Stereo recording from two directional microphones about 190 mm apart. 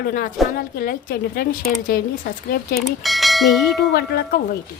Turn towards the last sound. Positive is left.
turn(degrees=55)  # may be behind; listen again after turning